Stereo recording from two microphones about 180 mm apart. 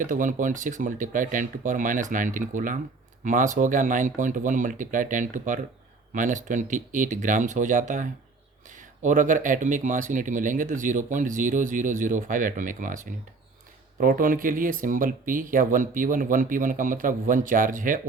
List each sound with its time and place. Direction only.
0.0 s speech: 45° right (ahead or behind)
14.0 s speech: 50° right (ahead or behind)